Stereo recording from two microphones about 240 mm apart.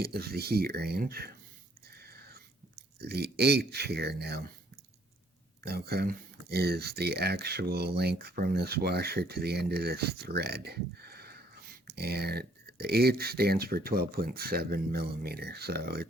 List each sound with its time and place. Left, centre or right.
0.0 s speech: right
1.9 s a sound: right
3.0 s speech: right
5.6 s speech: right